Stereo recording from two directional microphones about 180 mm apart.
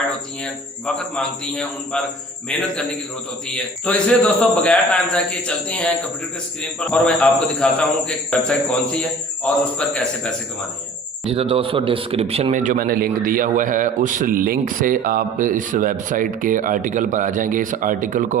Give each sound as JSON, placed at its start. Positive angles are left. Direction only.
{"t": 0.9, "sound": "a man's voice", "side_deg": 5}
{"t": 11.3, "sound": "a man's voice", "side_deg": -30}